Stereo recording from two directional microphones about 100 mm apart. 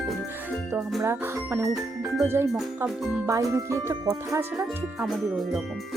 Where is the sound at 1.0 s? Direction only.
25° right (ahead or behind).